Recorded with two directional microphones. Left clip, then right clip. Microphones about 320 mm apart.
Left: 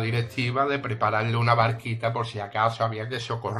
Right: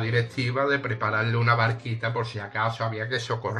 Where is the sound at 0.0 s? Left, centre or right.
Centre.